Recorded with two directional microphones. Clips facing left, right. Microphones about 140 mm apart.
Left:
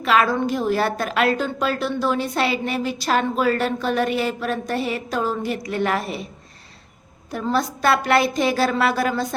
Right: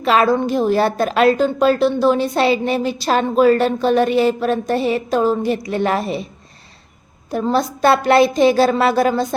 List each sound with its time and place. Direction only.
0.0 s a woman's voice: 30° right (ahead or behind)
7.3 s a woman's voice: 25° right (ahead or behind)